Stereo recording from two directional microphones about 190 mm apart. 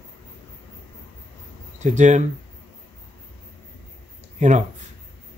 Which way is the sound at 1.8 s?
40° right (ahead or behind).